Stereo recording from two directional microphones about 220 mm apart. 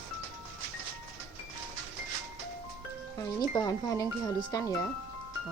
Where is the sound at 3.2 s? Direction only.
20° left (ahead or behind).